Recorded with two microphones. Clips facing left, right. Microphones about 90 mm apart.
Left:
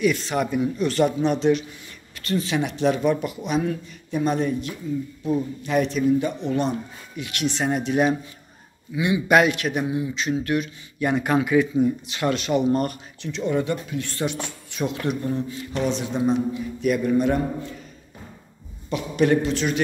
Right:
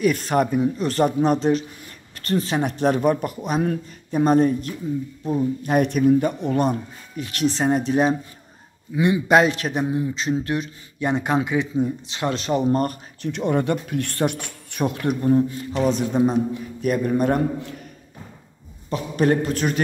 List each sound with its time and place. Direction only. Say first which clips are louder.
0.0 s speech: right 3 dB; 45° right (ahead or behind)
0.5 s a man's voice: right 1 dB; 35° right (ahead or behind)
5.6 s speech: right 4 dB; 50° right (ahead or behind)
9.3 s a man's voice: even; 30° right (ahead or behind)
13.3 s speech: right 2 dB; 55° right (ahead or behind)
18.9 s a man's voice: even; 40° right (ahead or behind)